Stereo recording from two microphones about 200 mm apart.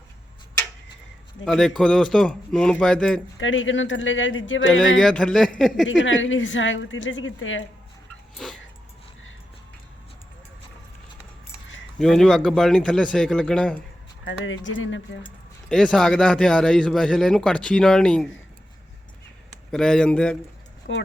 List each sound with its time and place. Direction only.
1.5 s a man's voice: centre (ahead or behind)
3.3 s a woman's voice: 75° left (ahead or behind)
4.9 s a man's voice: centre (ahead or behind)
5.9 s a woman's voice: 75° left (ahead or behind)
11.9 s a man's voice: centre (ahead or behind)
14.3 s a woman's voice: 70° left (ahead or behind)
15.7 s a man's voice: 5° left (ahead or behind)
19.7 s a man's voice: 5° left (ahead or behind)
20.9 s speech: 65° left (ahead or behind)